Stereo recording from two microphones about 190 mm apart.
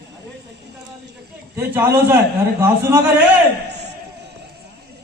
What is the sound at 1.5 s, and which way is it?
Speech, 10° right (ahead or behind).